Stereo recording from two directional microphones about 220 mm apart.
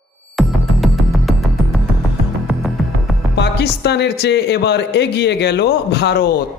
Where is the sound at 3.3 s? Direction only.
50° left (ahead or behind).